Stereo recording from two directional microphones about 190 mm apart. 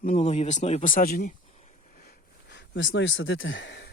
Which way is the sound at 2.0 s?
60° left (ahead or behind).